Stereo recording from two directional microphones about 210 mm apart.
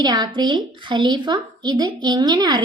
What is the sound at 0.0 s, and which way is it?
A woman's voice, 20° right (ahead or behind).